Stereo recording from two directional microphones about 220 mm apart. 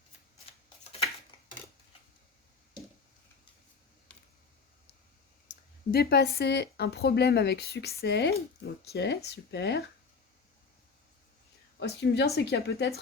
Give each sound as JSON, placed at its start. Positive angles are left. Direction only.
{"t": 4.1, "sound": "a sound", "side_deg": 5}
{"t": 5.9, "sound": "speech", "side_deg": 45}
{"t": 11.8, "sound": "speech", "side_deg": 50}